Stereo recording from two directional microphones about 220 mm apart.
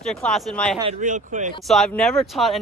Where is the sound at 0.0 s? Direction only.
Centre (ahead or behind).